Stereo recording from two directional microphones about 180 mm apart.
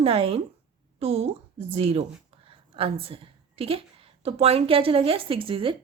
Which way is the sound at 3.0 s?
30° right (ahead or behind).